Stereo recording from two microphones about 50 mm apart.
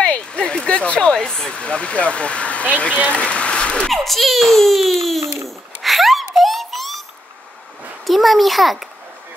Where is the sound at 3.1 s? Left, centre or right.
Left.